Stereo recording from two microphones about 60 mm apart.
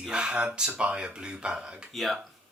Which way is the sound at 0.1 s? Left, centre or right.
Centre.